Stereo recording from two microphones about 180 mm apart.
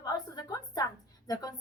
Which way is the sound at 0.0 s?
20° left (ahead or behind).